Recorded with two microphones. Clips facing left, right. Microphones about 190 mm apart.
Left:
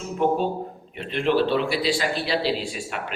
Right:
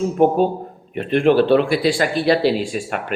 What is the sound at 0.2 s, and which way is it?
A man's voice, 45° right (ahead or behind).